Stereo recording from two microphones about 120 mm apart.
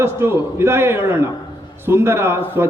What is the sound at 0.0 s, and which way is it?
A man's voice, 20° right (ahead or behind).